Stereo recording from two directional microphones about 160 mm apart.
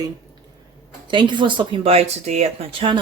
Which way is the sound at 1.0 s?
30° right (ahead or behind).